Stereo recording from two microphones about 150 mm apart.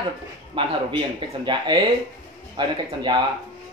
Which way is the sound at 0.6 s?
30° right (ahead or behind).